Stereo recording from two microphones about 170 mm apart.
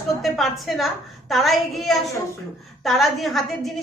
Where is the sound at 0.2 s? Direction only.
Centre (ahead or behind).